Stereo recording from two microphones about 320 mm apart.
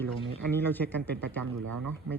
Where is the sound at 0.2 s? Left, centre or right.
Centre.